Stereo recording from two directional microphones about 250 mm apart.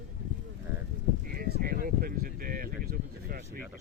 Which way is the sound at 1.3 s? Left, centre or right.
Right.